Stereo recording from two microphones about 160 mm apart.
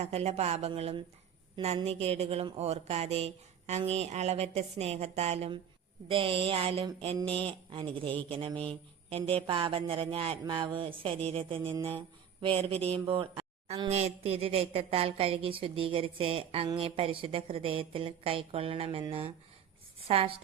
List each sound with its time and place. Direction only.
0.0 s speech: 40° right (ahead or behind)
20.1 s speech: 35° right (ahead or behind)